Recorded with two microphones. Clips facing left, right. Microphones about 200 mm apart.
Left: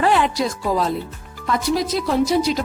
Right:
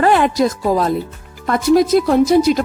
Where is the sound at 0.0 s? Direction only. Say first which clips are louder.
Right 5 dB; 50° right (ahead or behind).